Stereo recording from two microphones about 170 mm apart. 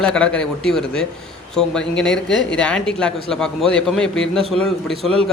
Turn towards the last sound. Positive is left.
turn(degrees=0)  # may be behind; listen again after turning